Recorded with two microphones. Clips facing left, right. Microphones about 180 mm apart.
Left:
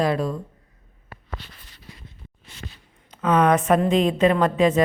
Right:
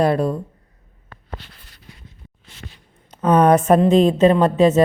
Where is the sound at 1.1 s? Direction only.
10° left (ahead or behind).